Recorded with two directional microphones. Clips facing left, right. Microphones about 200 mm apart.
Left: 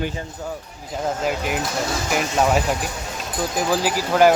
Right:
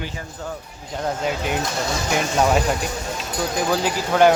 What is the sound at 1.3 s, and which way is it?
Speech, 5° left (ahead or behind).